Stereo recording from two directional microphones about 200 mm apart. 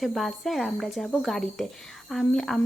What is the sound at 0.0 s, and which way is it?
A woman's voice, centre (ahead or behind).